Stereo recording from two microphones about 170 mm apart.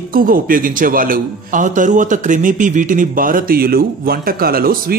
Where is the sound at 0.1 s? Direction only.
55° right (ahead or behind).